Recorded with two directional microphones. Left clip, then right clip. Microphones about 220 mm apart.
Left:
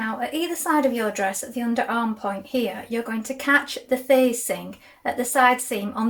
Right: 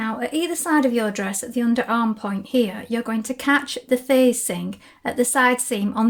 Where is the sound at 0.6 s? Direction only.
45° right (ahead or behind).